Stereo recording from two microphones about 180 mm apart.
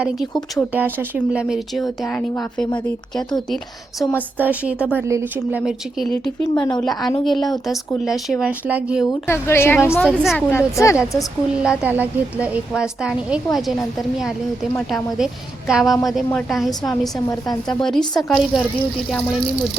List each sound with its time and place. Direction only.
0.5 s a woman's voice: 10° right (ahead or behind)
4.4 s a woman's voice: 10° right (ahead or behind)
6.4 s speech: 25° left (ahead or behind)
7.3 s a woman's voice: centre (ahead or behind)
9.0 s a woman's voice: 15° left (ahead or behind)
10.0 s a woman's voice: centre (ahead or behind)
10.3 s a woman's voice: 15° left (ahead or behind)
11.6 s a woman's voice: 5° right (ahead or behind)
18.2 s a woman's voice: centre (ahead or behind)